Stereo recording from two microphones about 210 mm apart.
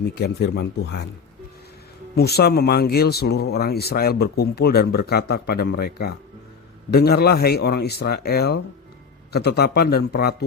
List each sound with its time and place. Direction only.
0.0 s speech: 50° left (ahead or behind)
2.1 s speech: 50° left (ahead or behind)